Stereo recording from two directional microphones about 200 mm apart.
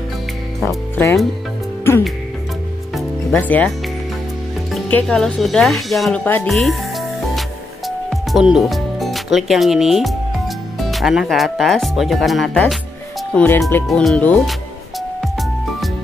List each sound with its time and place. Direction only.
0.7 s speech: 15° left (ahead or behind)
2.9 s music: 5° left (ahead or behind)
4.7 s speech: 5° left (ahead or behind)